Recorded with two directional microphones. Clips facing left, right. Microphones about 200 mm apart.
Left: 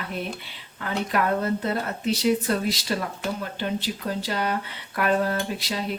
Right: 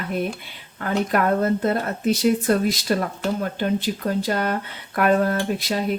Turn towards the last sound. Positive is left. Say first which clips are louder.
# right 5 dB
turn(degrees=-50)  # may be behind; listen again after turning